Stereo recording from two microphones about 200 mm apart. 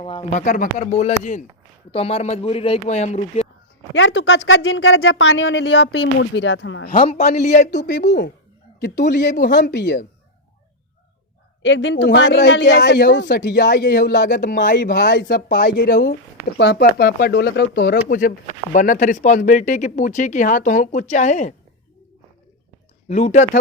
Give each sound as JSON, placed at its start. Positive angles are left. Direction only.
{"t": 0.0, "sound": "speech", "side_deg": 25}
{"t": 3.9, "sound": "speech", "side_deg": 70}
{"t": 6.9, "sound": "a man's voice", "side_deg": 30}
{"t": 7.8, "sound": "speech", "side_deg": 60}
{"t": 9.5, "sound": "speech", "side_deg": 60}
{"t": 11.6, "sound": "speech", "side_deg": 65}
{"t": 14.6, "sound": "speech", "side_deg": 45}
{"t": 14.9, "sound": "speech", "side_deg": 60}
{"t": 23.0, "sound": "speech", "side_deg": 35}